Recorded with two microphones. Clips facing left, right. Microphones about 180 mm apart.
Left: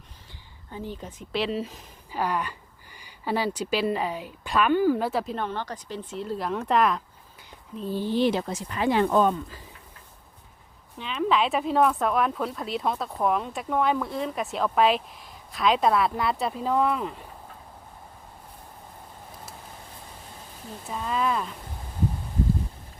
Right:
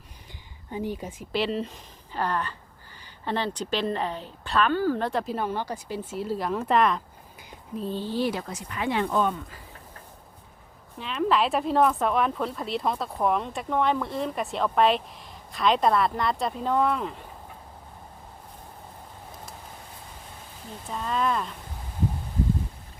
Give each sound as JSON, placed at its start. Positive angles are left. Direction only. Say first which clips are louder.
{"t": 0.7, "sound": "speech", "louder": "right 5 dB", "side_deg": -15}
{"t": 7.9, "sound": "speech", "louder": "left 5 dB", "side_deg": 15}
{"t": 10.9, "sound": "speech", "louder": "even", "side_deg": 0}
{"t": 20.9, "sound": "speech", "louder": "even", "side_deg": 5}